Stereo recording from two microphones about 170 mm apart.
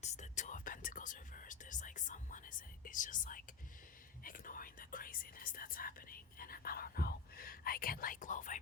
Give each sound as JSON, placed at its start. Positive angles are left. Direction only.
{"t": 0.0, "sound": "whispering", "side_deg": 45}
{"t": 4.2, "sound": "speech", "side_deg": 55}